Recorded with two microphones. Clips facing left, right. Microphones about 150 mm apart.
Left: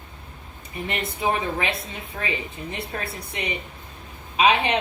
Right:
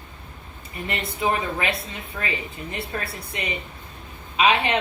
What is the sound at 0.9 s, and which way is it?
Speech, 20° left (ahead or behind).